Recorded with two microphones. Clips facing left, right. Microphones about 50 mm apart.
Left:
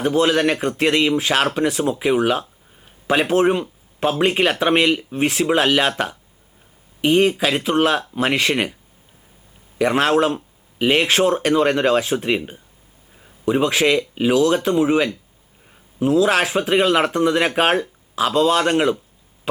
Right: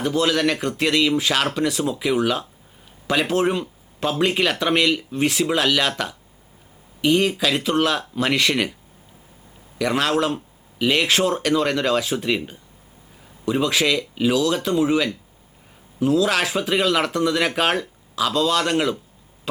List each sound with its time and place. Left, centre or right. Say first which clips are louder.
0.0 s speech: left 3 dB; left
9.7 s speech: left 4 dB; left
13.5 s speech: left 3 dB; left